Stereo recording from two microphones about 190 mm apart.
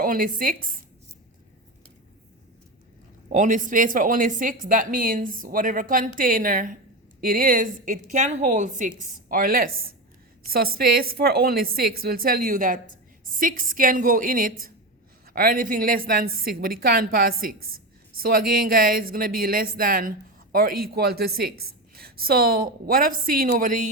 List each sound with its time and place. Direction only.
0.0 s speech: 45° right (ahead or behind)
3.3 s speech: 40° right (ahead or behind)